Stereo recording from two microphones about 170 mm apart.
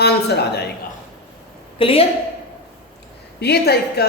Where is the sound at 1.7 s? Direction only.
35° left (ahead or behind).